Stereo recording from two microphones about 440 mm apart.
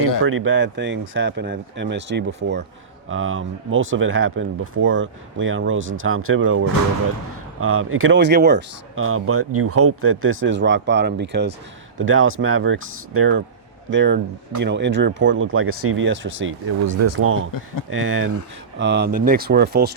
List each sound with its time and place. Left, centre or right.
0.3 s speech: right